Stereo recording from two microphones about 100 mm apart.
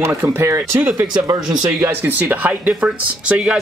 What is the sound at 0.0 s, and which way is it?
Speech, 30° right (ahead or behind).